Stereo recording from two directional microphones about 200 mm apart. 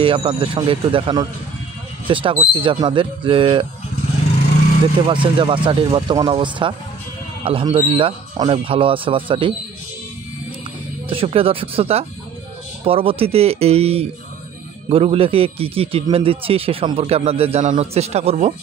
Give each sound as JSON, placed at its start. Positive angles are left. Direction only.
{"t": 0.0, "sound": "a man's voice", "side_deg": -25}
{"t": 5.0, "sound": "a man's voice", "side_deg": -25}
{"t": 11.1, "sound": "a man's voice", "side_deg": -30}